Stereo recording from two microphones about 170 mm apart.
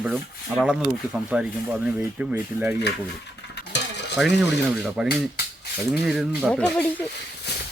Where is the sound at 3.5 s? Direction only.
90° left.